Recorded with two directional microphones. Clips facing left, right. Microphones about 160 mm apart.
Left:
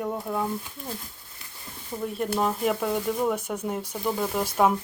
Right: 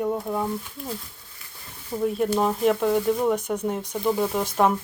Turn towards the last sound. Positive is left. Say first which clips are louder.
# right 1 dB
turn(degrees=5)  # may be behind; listen again after turning